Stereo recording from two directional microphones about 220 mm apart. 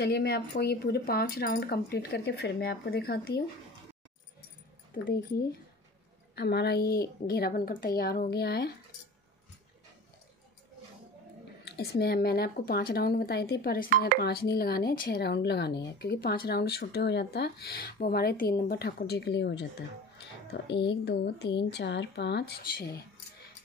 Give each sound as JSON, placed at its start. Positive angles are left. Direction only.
{"t": 0.0, "sound": "speech", "side_deg": 45}
{"t": 5.0, "sound": "speech", "side_deg": 45}
{"t": 11.6, "sound": "speech", "side_deg": 45}
{"t": 20.8, "sound": "speech", "side_deg": 50}